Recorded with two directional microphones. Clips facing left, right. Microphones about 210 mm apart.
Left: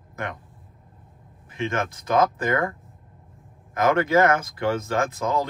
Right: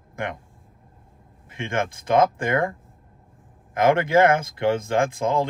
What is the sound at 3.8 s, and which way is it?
Speech, 30° right (ahead or behind).